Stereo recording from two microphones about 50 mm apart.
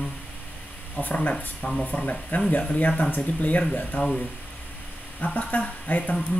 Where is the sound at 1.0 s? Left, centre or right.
Left.